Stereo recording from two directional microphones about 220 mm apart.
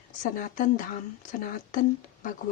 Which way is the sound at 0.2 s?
35° left (ahead or behind).